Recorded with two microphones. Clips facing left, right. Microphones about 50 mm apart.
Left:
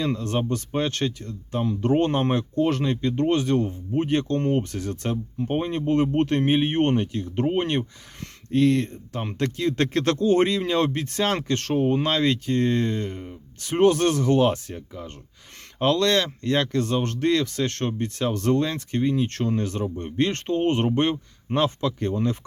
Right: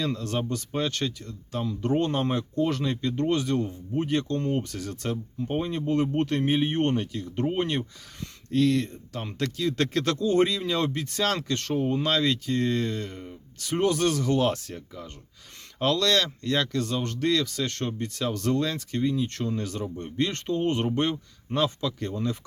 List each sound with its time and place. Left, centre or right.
0.0 s speech: left
14.4 s speech: centre
15.8 s speech: left
19.6 s speech: left